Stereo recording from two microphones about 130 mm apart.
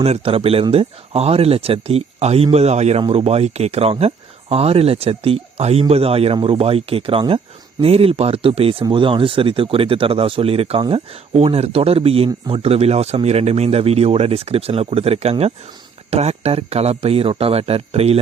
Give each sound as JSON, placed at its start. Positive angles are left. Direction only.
{"t": 0.0, "sound": "speech", "side_deg": -50}